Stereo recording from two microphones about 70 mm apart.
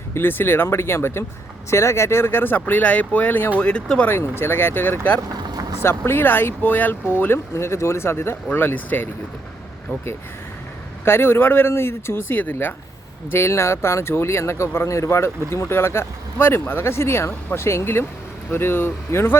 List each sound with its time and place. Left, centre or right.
0.1 s speech: left
3.6 s speech: centre
4.0 s speech: left
7.5 s speech: left
11.0 s speech: left
13.3 s speech: left